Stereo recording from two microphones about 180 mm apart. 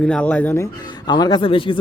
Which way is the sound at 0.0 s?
5° left (ahead or behind).